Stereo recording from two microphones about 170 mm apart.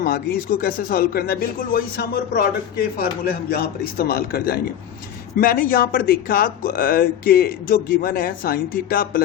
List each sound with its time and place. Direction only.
0.0 s speech: 60° left (ahead or behind)